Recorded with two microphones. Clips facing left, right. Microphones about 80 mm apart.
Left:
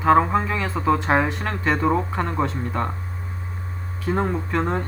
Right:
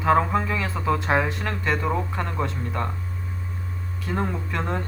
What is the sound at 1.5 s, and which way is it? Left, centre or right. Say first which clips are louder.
Speech: left 4 dB; left.